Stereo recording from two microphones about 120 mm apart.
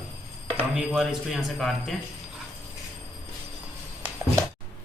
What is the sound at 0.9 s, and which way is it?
A man's voice, centre (ahead or behind).